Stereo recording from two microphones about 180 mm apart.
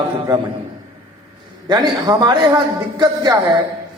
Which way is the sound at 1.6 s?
25° right (ahead or behind).